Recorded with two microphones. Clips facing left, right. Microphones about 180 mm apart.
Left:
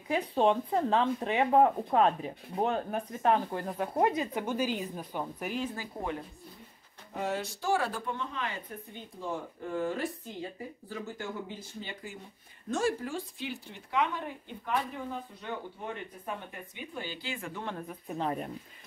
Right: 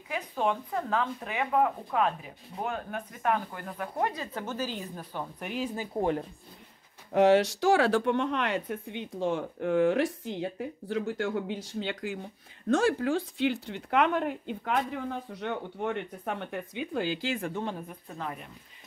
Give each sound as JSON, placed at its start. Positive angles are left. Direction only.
{"t": 0.1, "sound": "speech", "side_deg": 30}
{"t": 7.2, "sound": "speech", "side_deg": -85}
{"t": 18.0, "sound": "speech", "side_deg": 20}